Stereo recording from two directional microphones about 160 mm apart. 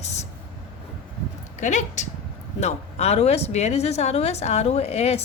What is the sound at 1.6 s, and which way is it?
A woman's voice, 50° left (ahead or behind).